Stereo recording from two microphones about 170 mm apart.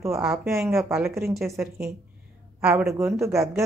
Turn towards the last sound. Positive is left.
turn(degrees=-15)  # may be behind; listen again after turning